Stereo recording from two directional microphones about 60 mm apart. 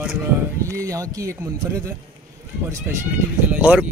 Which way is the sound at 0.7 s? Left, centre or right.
Right.